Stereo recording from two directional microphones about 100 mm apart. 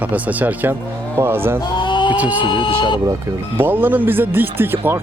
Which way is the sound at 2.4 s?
55° left (ahead or behind).